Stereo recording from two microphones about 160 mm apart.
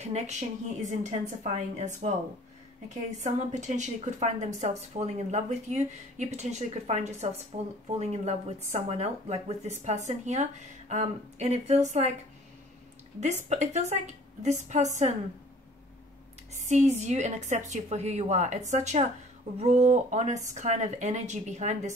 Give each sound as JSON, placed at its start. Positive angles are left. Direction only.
{"t": 0.0, "sound": "a woman's voice", "side_deg": -45}
{"t": 13.2, "sound": "a woman's voice", "side_deg": -45}
{"t": 16.5, "sound": "a woman's voice", "side_deg": -45}